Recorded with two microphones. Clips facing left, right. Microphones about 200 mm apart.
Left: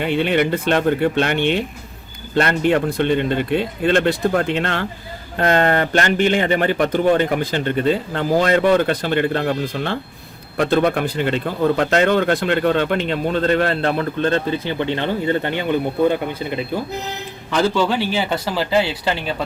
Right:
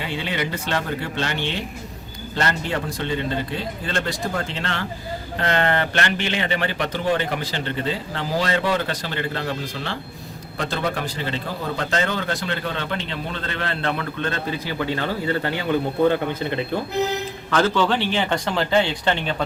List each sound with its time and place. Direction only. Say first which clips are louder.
0.0 s a man's voice: left 9 dB; 60° left (ahead or behind); by 19.4 s 5° left (ahead or behind)